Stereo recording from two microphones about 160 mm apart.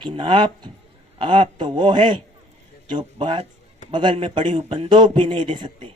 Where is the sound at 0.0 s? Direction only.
30° right (ahead or behind).